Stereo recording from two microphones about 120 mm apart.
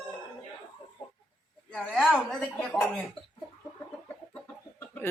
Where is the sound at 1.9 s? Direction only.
Centre (ahead or behind).